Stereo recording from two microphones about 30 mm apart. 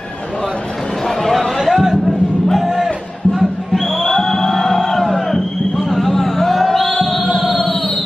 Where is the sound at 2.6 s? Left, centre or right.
Centre.